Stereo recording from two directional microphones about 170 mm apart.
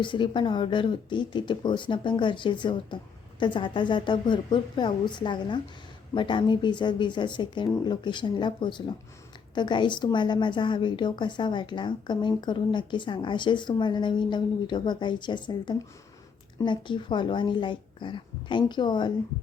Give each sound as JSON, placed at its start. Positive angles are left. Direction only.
{"t": 0.0, "sound": "a woman's voice", "side_deg": 30}